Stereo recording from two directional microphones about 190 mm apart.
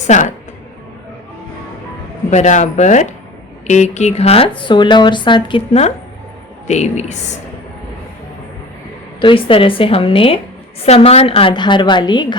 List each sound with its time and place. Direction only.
0.1 s speech: 40° left (ahead or behind)
2.3 s speech: 40° left (ahead or behind)
9.2 s speech: 30° left (ahead or behind)